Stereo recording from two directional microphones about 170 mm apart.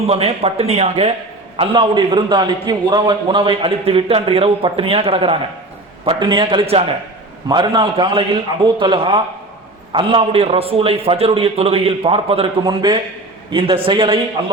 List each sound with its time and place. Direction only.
0.1 s a man's voice: 35° right (ahead or behind)